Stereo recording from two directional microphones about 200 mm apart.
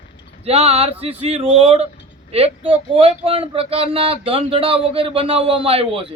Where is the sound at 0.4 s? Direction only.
30° right (ahead or behind).